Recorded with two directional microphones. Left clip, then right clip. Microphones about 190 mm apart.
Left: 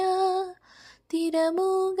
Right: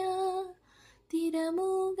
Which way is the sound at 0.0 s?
40° left (ahead or behind).